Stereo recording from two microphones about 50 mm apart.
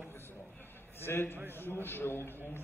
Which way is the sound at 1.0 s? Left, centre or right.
Left.